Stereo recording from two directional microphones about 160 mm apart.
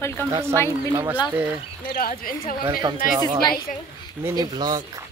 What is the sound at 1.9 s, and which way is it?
Speech, 65° left (ahead or behind).